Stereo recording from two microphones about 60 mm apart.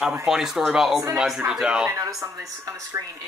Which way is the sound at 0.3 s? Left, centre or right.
Centre.